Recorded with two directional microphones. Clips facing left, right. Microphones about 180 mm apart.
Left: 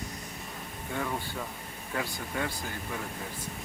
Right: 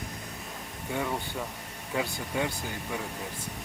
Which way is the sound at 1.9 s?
15° right (ahead or behind).